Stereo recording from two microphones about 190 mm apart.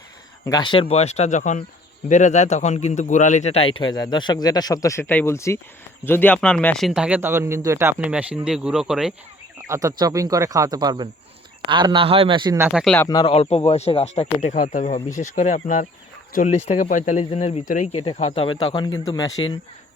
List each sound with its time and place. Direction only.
0.4 s a man's voice: 20° left (ahead or behind); by 9.1 s 5° right (ahead or behind)
9.6 s a man's voice: 15° right (ahead or behind)
12.5 s speech: 10° right (ahead or behind)
12.8 s speech: 5° left (ahead or behind)
13.1 s a man's voice: 20° left (ahead or behind)
13.3 s a man's voice: 30° left (ahead or behind)